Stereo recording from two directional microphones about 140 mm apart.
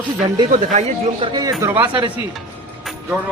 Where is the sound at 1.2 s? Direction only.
30° right (ahead or behind).